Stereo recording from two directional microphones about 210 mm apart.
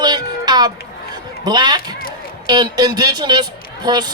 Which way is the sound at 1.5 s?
20° right (ahead or behind).